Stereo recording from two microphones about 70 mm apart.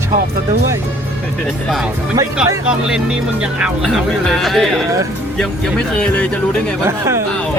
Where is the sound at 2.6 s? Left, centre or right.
Centre.